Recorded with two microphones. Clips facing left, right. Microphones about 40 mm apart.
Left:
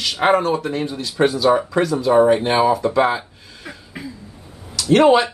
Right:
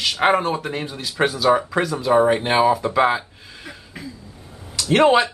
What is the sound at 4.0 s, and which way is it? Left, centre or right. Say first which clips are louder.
Cough: left 3 dB; centre.